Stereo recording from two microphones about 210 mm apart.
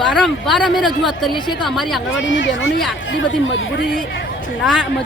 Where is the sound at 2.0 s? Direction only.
65° left (ahead or behind).